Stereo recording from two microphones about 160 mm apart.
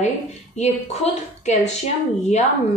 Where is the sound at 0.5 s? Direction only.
45° left (ahead or behind).